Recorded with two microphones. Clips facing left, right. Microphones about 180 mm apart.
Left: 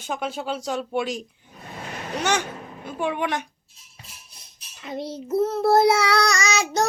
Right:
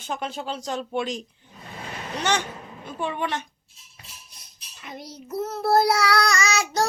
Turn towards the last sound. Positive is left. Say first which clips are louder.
# left 1 dB
turn(degrees=25)  # may be behind; listen again after turning